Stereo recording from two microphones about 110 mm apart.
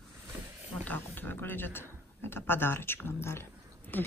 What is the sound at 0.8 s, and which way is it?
Speech, 15° left (ahead or behind).